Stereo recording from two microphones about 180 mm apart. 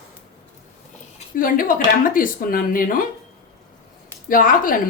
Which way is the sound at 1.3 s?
50° left (ahead or behind).